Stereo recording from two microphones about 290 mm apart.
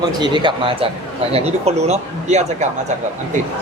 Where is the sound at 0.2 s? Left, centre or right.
Centre.